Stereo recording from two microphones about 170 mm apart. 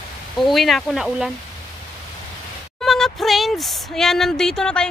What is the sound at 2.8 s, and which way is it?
A man's voice, centre (ahead or behind).